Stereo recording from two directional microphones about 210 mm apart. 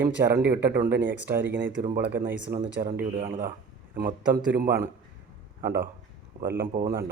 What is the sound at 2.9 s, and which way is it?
Speech, 40° right (ahead or behind).